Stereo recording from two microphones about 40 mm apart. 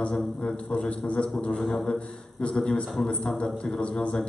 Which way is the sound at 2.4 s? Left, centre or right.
Left.